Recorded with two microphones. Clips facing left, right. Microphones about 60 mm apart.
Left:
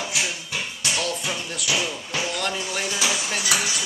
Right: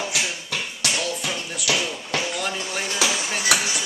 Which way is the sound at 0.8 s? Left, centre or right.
Right.